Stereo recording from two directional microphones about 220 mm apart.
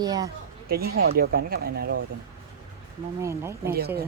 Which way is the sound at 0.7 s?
45° right (ahead or behind).